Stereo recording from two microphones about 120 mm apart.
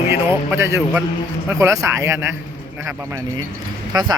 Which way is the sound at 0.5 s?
20° right (ahead or behind).